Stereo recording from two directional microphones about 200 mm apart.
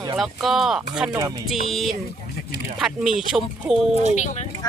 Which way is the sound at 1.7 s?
Centre (ahead or behind).